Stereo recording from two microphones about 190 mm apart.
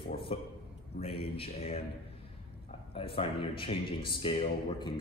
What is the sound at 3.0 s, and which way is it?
A man's voice, 30° left (ahead or behind).